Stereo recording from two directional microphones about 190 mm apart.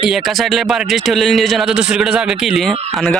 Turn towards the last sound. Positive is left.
turn(degrees=0)  # may be behind; listen again after turning